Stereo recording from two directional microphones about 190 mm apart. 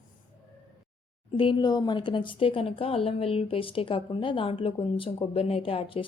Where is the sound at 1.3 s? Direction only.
25° left (ahead or behind).